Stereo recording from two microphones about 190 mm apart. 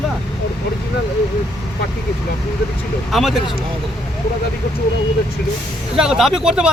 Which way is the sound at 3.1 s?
Centre (ahead or behind).